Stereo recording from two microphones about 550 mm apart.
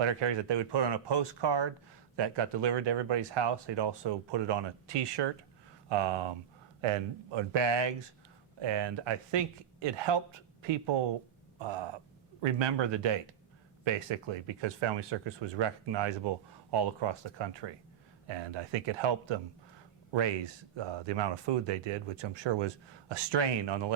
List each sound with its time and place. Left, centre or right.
0.0 s speech: right
20.7 s speech: right